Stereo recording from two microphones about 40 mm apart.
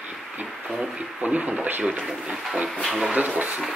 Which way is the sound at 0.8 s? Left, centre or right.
Centre.